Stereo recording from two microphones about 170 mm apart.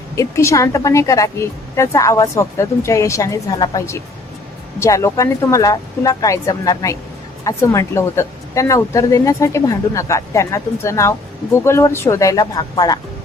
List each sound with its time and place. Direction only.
0.2 s a woman's voice: 15° left (ahead or behind)